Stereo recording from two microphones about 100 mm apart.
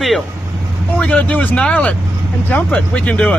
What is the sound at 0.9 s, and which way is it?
Speech, 15° left (ahead or behind).